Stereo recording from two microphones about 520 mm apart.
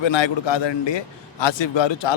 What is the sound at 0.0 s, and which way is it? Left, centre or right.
A man's voice, left.